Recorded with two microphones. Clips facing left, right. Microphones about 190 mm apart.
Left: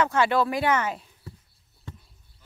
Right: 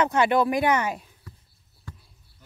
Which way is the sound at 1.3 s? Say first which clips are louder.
Left 4 dB; 30° left (ahead or behind).